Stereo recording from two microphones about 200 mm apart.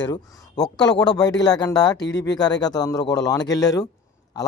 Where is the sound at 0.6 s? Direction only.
20° left (ahead or behind).